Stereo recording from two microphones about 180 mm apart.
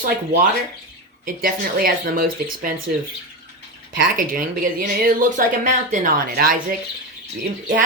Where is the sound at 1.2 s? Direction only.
55° right (ahead or behind).